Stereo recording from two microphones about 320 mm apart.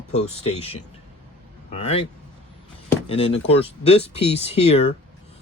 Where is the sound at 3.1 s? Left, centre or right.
Centre.